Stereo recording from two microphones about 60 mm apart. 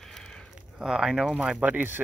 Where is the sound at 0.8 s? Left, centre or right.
Centre.